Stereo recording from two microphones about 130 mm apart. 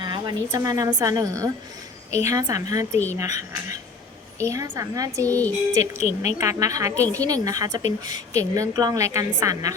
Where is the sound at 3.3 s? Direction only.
70° left (ahead or behind).